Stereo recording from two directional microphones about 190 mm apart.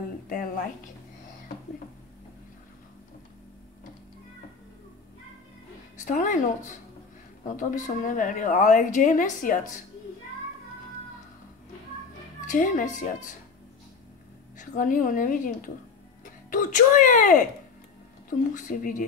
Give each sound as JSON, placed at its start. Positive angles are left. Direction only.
{"t": 5.9, "sound": "a woman's voice", "side_deg": 45}
{"t": 12.4, "sound": "a woman's voice", "side_deg": 45}
{"t": 14.6, "sound": "a woman's voice", "side_deg": 45}
{"t": 18.5, "sound": "a woman's voice", "side_deg": 45}